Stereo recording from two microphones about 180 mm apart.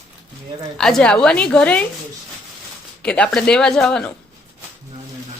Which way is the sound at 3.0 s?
5° left (ahead or behind).